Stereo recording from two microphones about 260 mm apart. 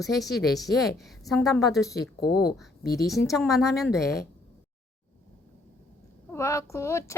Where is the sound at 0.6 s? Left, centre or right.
Centre.